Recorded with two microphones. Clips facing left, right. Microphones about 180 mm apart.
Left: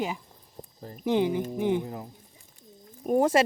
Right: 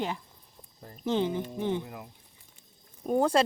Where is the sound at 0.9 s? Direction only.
10° left (ahead or behind).